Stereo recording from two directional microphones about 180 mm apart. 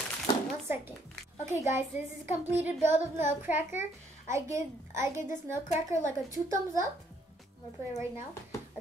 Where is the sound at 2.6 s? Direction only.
10° right (ahead or behind).